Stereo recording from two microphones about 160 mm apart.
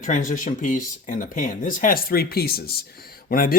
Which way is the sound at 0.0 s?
55° left (ahead or behind).